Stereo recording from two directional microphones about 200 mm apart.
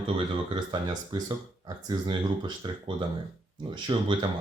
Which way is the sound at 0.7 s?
20° right (ahead or behind).